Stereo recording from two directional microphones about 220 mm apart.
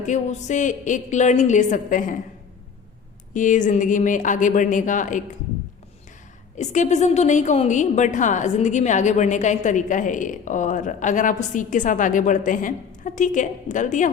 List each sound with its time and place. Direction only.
0.0 s a woman's voice: 35° left (ahead or behind)
3.3 s a woman's voice: 35° left (ahead or behind)
6.6 s a woman's voice: 30° left (ahead or behind)